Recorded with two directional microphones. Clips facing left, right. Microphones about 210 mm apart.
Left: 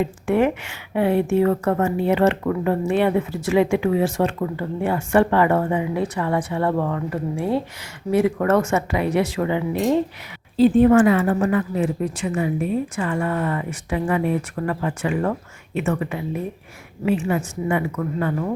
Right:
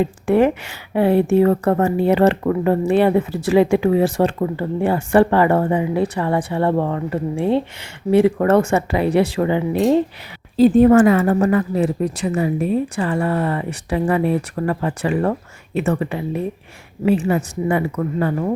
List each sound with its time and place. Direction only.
0.0 s a woman's voice: 35° right (ahead or behind)